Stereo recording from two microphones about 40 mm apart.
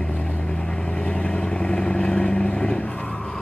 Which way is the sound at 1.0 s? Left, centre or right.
Centre.